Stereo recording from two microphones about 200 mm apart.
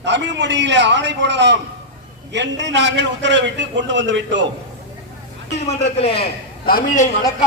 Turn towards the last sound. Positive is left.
turn(degrees=45)  # may be behind; listen again after turning